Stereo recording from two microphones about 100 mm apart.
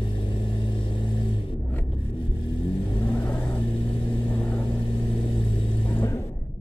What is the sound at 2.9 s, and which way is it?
Vehicle, 15° left (ahead or behind).